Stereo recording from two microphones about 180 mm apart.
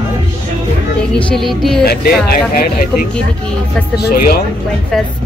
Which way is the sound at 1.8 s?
55° left (ahead or behind).